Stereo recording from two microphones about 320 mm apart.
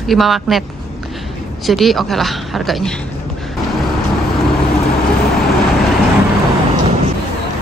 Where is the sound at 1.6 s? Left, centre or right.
Centre.